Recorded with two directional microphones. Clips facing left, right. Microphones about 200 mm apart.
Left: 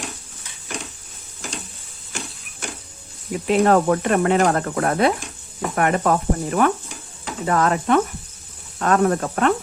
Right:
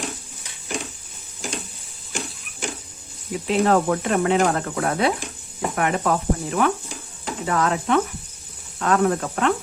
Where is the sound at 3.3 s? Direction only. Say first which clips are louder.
Left 3 dB; 50° left (ahead or behind).